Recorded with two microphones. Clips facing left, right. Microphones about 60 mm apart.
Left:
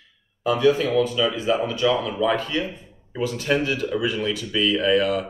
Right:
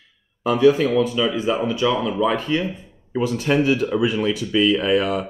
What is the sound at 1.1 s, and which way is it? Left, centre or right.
Speech, centre.